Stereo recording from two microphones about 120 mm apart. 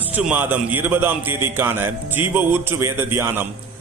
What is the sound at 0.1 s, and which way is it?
A man's voice, 10° right (ahead or behind).